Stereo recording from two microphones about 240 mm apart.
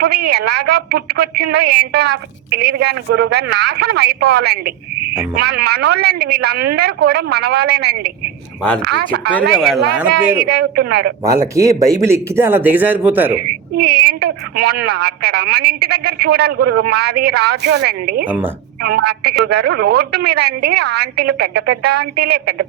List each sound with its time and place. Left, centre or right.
0.0 s a woman's voice: right
9.5 s speech: centre
10.3 s a woman's voice: right
11.2 s speech: centre
13.7 s a woman's voice: right